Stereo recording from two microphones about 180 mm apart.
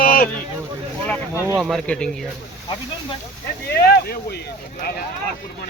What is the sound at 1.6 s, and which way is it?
Speech, centre (ahead or behind).